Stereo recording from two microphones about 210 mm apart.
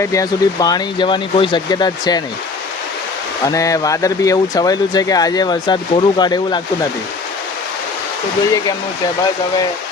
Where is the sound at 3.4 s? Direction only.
15° left (ahead or behind).